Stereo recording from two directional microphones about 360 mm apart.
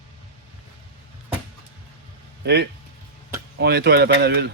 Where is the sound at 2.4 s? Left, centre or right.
Right.